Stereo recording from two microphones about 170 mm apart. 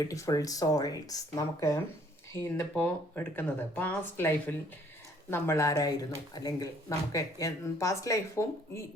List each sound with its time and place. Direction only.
0.0 s speech: 20° left (ahead or behind)